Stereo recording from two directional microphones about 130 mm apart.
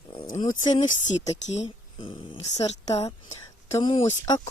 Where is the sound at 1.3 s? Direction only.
60° left (ahead or behind).